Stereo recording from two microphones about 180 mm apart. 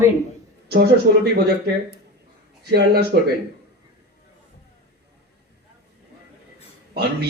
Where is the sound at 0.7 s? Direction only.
65° right (ahead or behind).